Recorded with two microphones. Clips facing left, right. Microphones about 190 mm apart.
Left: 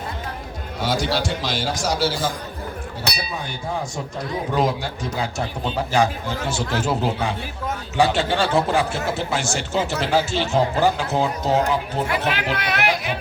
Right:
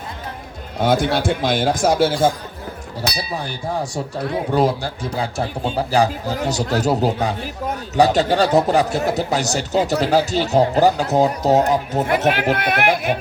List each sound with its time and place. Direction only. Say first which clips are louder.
0.8 s a man's voice: right 5 dB; 55° right (ahead or behind)
4.5 s speech: right 3 dB; 35° right (ahead or behind); by 13.1 s 50° right (ahead or behind)